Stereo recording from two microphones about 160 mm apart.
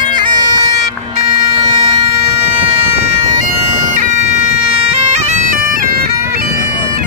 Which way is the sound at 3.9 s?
50° right (ahead or behind).